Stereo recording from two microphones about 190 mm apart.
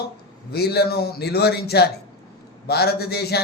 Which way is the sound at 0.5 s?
55° left (ahead or behind).